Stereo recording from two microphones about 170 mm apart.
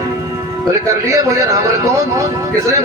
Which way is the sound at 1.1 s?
20° right (ahead or behind).